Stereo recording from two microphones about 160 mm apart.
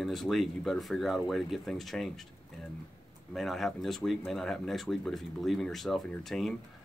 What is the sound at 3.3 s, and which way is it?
Speech, centre (ahead or behind).